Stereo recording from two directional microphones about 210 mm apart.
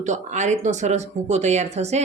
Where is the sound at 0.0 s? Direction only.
35° right (ahead or behind).